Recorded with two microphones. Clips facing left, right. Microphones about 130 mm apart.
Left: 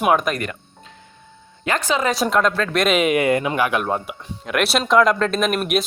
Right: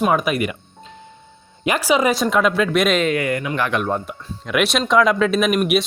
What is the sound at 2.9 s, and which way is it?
Speech, 10° left (ahead or behind).